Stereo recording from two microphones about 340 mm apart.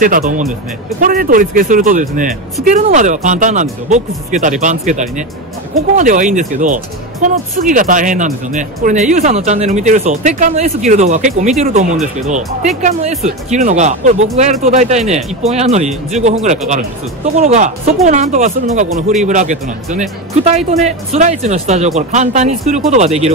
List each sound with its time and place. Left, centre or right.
0.0 s speech: right